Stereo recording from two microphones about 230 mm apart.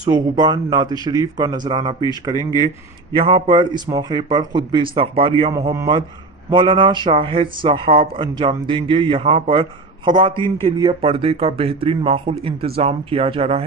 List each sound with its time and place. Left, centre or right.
0.1 s a man's voice: centre